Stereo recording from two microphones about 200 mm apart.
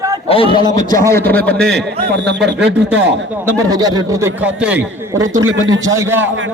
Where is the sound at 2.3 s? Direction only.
55° right (ahead or behind).